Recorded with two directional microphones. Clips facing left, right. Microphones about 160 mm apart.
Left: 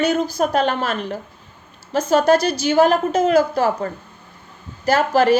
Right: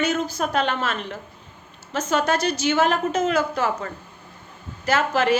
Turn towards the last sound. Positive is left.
turn(degrees=35)  # may be behind; listen again after turning